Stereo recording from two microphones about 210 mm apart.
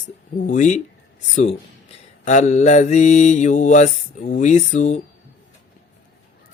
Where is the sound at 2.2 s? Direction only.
35° left (ahead or behind).